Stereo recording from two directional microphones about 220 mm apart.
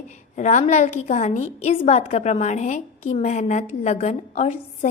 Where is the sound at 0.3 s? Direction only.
35° left (ahead or behind).